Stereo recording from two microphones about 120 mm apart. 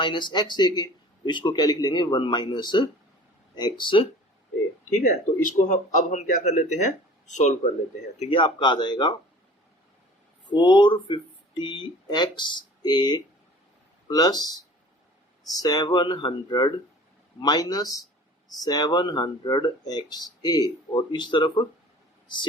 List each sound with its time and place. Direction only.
0.0 s speech: 40° left (ahead or behind)
5.0 s speech: 90° left
8.2 s speech: 45° left (ahead or behind)
10.5 s speech: 40° left (ahead or behind)
15.5 s speech: 35° left (ahead or behind)